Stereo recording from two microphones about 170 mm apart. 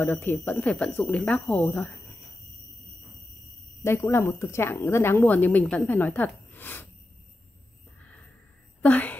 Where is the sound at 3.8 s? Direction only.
15° left (ahead or behind).